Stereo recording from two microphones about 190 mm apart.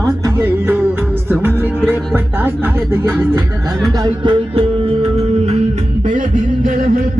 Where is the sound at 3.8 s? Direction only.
20° right (ahead or behind); by 6.7 s 45° right (ahead or behind).